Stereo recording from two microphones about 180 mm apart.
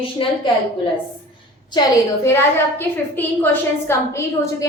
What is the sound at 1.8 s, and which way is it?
Speech, 25° left (ahead or behind).